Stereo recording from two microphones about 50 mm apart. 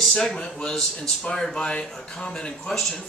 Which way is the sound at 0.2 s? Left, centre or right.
Centre.